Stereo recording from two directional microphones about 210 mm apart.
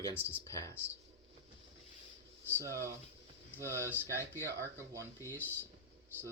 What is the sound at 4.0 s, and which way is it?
Speech, 10° left (ahead or behind).